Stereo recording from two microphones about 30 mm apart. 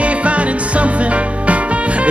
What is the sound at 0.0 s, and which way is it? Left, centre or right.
Music, right.